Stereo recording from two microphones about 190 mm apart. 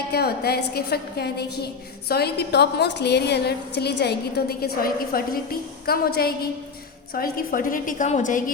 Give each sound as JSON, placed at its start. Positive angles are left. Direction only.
{"t": 0.1, "sound": "a woman's voice", "side_deg": 55}